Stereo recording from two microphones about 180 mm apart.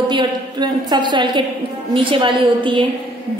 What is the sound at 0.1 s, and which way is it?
A woman's voice, 25° right (ahead or behind).